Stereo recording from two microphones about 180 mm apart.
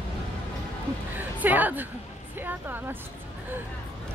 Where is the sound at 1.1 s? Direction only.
10° right (ahead or behind).